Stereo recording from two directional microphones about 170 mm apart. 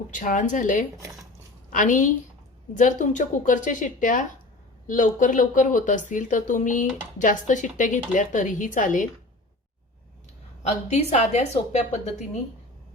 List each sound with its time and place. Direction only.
0.1 s speech: 50° left (ahead or behind)
10.6 s a woman's voice: 40° left (ahead or behind)